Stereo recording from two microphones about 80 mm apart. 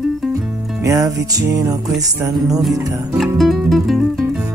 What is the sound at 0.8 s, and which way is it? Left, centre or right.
Music, right.